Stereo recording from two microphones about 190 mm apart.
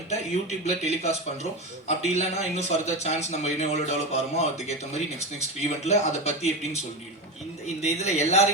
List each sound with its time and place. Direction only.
0.6 s speech: 35° left (ahead or behind)